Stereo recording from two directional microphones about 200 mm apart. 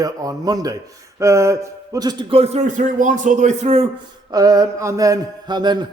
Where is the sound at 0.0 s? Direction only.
20° right (ahead or behind).